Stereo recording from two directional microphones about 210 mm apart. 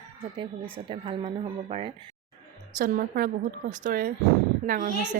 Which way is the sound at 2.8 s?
40° right (ahead or behind).